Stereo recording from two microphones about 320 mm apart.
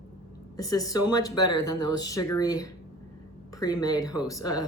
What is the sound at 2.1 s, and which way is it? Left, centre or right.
Speech, centre.